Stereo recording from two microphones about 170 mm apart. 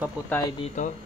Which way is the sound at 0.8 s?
45° left (ahead or behind).